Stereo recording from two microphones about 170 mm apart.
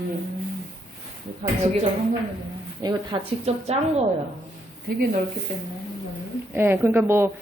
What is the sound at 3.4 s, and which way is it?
Speech, 40° right (ahead or behind).